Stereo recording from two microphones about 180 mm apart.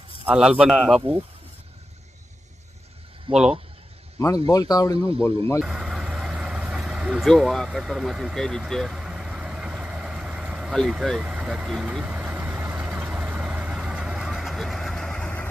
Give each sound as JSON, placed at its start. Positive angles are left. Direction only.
{"t": 0.3, "sound": "a man's voice", "side_deg": -5}
{"t": 3.3, "sound": "speech", "side_deg": -30}
{"t": 4.2, "sound": "speech", "side_deg": 20}
{"t": 5.5, "sound": "vehicle", "side_deg": -5}